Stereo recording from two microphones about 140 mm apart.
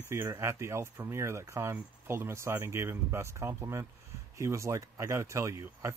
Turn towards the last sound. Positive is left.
turn(degrees=-20)  # may be behind; listen again after turning